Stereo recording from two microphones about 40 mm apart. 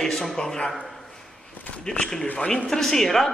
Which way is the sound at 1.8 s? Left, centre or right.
Left.